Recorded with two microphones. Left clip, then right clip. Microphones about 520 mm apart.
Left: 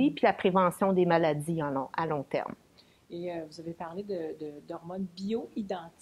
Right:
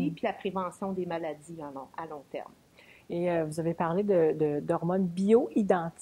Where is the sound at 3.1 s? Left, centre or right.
Right.